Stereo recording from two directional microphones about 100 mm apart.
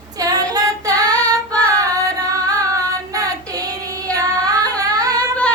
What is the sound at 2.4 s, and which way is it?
Child singing, 35° right (ahead or behind).